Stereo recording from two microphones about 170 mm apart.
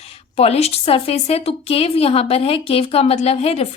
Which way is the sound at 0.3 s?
35° left (ahead or behind).